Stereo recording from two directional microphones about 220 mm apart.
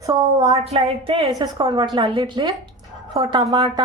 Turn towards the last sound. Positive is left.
turn(degrees=-20)  # may be behind; listen again after turning